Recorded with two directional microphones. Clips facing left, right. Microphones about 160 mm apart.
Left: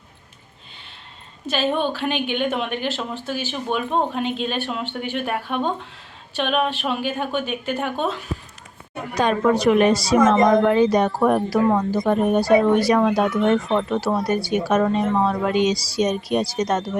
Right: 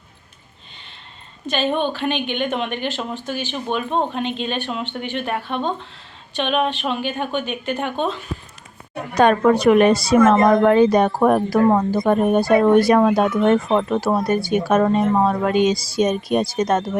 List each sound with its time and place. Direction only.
1.5 s speech: 5° left (ahead or behind)
9.1 s a woman's voice: 60° right (ahead or behind)